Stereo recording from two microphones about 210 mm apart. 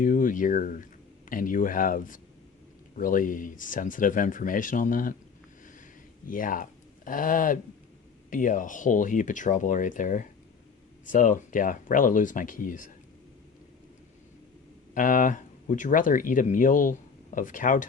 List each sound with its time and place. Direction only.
0.0 s speech: 40° left (ahead or behind)
6.2 s speech: 40° left (ahead or behind)
14.9 s speech: 40° left (ahead or behind)